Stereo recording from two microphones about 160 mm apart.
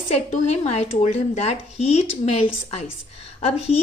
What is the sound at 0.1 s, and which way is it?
Speech, 40° left (ahead or behind).